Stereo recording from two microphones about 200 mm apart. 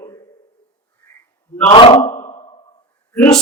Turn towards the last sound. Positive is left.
turn(degrees=5)  # may be behind; listen again after turning